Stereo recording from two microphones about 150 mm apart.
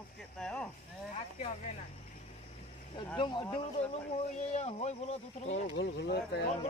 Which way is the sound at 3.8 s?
45° left (ahead or behind).